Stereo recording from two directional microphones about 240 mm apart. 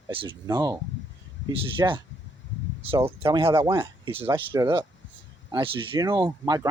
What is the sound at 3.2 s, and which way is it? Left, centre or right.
Speech, right.